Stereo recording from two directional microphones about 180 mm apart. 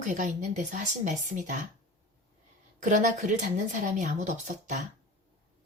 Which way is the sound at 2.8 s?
45° right (ahead or behind).